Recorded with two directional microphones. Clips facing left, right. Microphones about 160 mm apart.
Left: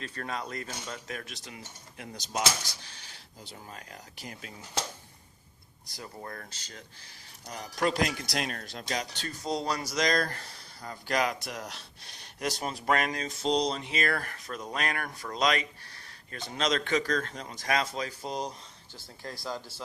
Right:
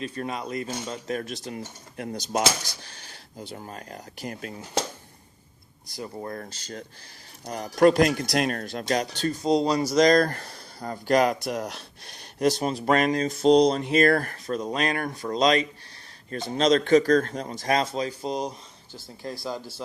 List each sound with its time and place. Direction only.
0.0 s speech: 15° right (ahead or behind)
1.1 s speech: 35° right (ahead or behind); by 4.6 s 55° right (ahead or behind)
6.0 s speech: 25° right (ahead or behind); by 9.0 s 55° right (ahead or behind)
9.4 s speech: 20° right (ahead or behind)
9.9 s speech: 40° right (ahead or behind)
12.4 s speech: 25° right (ahead or behind)
13.4 s speech: 55° right (ahead or behind)
14.4 s speech: 25° right (ahead or behind)